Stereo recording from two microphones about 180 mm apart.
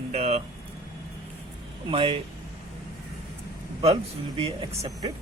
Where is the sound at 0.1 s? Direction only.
35° right (ahead or behind).